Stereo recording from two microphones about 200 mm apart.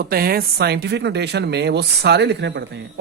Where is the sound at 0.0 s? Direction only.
50° right (ahead or behind).